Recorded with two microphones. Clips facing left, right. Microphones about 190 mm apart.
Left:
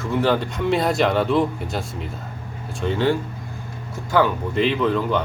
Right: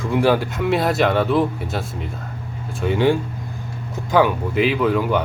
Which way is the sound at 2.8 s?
15° right (ahead or behind).